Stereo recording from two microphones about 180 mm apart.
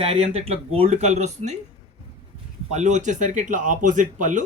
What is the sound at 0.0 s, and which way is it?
Speech, 35° right (ahead or behind).